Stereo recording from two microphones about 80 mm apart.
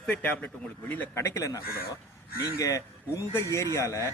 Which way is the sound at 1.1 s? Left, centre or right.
Left.